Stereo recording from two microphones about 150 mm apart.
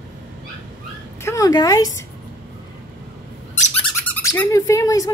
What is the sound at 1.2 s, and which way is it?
Speech, 20° left (ahead or behind).